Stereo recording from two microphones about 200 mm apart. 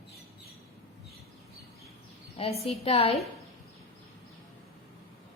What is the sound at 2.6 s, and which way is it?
Speech, 30° left (ahead or behind).